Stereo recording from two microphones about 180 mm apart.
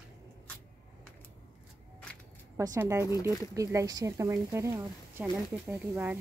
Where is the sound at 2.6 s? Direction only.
15° right (ahead or behind).